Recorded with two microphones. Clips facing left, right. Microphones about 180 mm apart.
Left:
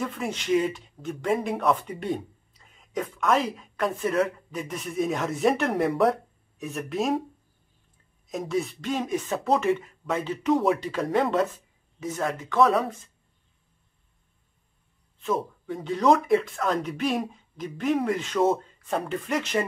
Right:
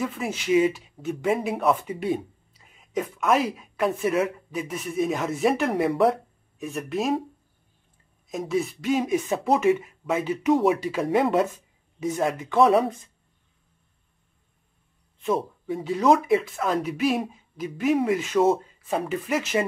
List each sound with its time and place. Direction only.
0.0 s speech: 5° right (ahead or behind)
8.3 s speech: centre (ahead or behind)
12.5 s speech: 25° right (ahead or behind)
15.6 s speech: 5° right (ahead or behind)